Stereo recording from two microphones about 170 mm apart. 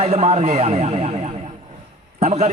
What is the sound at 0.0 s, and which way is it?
Speech, 35° right (ahead or behind).